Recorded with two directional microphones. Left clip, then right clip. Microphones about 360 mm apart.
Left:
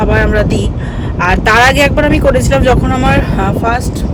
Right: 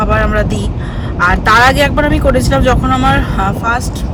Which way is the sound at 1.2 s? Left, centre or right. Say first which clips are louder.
Even; left.